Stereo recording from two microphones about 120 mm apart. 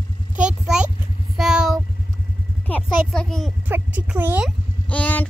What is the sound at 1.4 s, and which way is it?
Vehicle, 5° right (ahead or behind).